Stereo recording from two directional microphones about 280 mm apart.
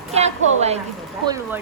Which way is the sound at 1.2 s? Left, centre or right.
Centre.